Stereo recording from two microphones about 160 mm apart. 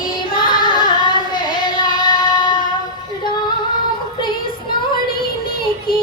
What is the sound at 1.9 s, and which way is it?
Child singing, 25° left (ahead or behind).